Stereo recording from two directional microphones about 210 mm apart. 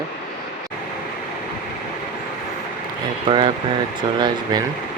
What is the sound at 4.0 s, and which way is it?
Speech, 20° right (ahead or behind).